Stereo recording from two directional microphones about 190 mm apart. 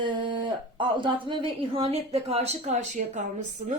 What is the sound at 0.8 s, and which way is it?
A woman's voice, 25° right (ahead or behind).